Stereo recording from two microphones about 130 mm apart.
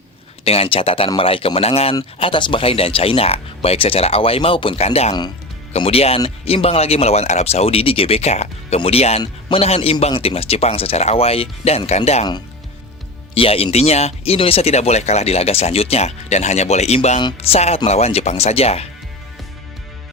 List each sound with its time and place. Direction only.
0.4 s speech: 50° left (ahead or behind)
13.3 s speech: 45° left (ahead or behind)